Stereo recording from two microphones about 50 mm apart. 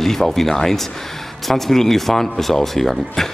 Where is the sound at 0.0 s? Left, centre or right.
Centre.